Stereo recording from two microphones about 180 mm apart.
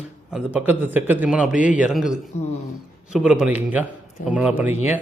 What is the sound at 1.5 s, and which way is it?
Speech, 45° left (ahead or behind).